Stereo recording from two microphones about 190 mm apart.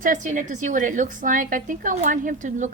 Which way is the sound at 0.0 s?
45° right (ahead or behind).